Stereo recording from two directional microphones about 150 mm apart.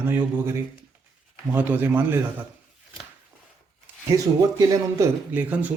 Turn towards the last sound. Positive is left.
turn(degrees=-10)  # may be behind; listen again after turning